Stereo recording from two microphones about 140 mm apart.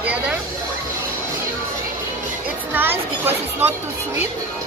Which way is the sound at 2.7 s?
15° right (ahead or behind).